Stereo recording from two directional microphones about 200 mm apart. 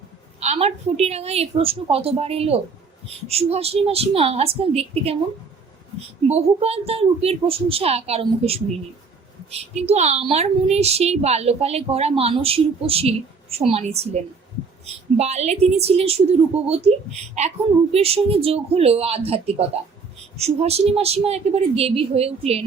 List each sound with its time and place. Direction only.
0.3 s a woman's voice: 35° right (ahead or behind)
6.2 s a woman's voice: 30° right (ahead or behind)
15.2 s a woman's voice: 35° right (ahead or behind)